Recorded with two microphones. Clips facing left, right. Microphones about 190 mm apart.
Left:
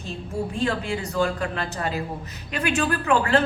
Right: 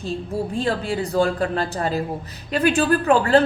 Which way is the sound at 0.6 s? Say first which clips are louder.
Right 3 dB; 35° right (ahead or behind).